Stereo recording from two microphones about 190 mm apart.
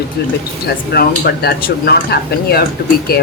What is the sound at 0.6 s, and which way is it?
Speech, 55° left (ahead or behind).